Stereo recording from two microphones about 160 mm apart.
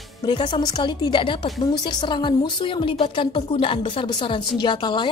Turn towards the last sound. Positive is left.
turn(degrees=30)  # may be behind; listen again after turning